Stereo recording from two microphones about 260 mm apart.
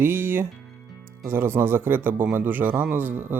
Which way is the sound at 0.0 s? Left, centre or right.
Centre.